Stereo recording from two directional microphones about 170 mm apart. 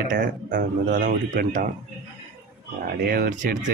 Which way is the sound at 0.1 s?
55° right (ahead or behind).